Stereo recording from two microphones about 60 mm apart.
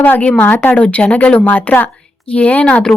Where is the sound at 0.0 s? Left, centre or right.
Left.